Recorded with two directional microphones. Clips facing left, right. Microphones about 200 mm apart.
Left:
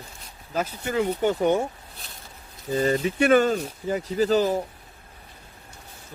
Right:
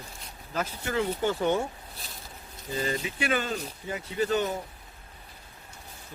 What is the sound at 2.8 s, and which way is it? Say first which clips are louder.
Speech: left 9 dB; 45° left (ahead or behind).